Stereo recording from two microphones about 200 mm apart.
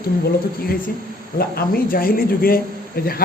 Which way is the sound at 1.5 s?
45° left (ahead or behind).